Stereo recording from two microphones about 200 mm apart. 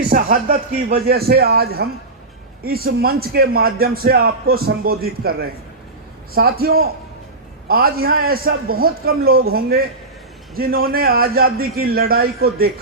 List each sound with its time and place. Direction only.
0.1 s speech: 45° right (ahead or behind)